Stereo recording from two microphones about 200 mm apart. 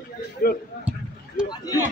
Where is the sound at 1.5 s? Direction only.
20° left (ahead or behind).